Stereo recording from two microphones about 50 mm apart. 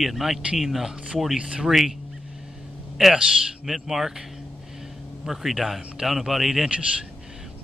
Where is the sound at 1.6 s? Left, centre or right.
Centre.